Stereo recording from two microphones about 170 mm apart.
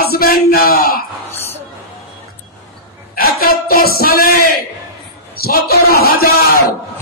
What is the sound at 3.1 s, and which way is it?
Speech, 60° left (ahead or behind).